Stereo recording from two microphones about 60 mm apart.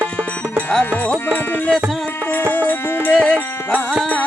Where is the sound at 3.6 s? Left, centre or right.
Left.